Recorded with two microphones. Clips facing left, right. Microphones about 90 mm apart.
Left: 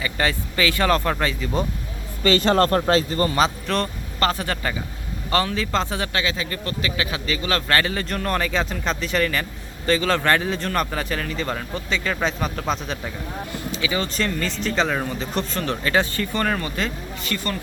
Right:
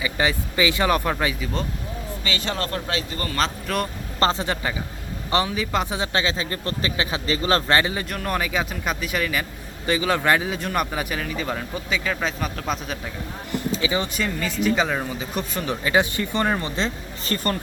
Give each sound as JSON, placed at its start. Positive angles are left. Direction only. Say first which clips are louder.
{"t": 0.0, "sound": "a man's voice", "louder": "right 1 dB", "side_deg": -15}
{"t": 2.2, "sound": "speech", "louder": "left 11 dB", "side_deg": 45}
{"t": 3.7, "sound": "speech", "louder": "left 2 dB", "side_deg": -5}
{"t": 4.2, "sound": "a man's voice", "louder": "right 1 dB", "side_deg": -25}
{"t": 6.1, "sound": "speech", "louder": "right 3 dB", "side_deg": -30}
{"t": 7.7, "sound": "speech", "louder": "right 1 dB", "side_deg": -20}
{"t": 8.1, "sound": "a man's voice", "louder": "left 2 dB", "side_deg": -5}
{"t": 13.8, "sound": "speech", "louder": "left 1 dB", "side_deg": -20}
{"t": 14.1, "sound": "a man's voice", "louder": "left 2 dB", "side_deg": -10}
{"t": 17.3, "sound": "speech", "louder": "right 3 dB", "side_deg": -40}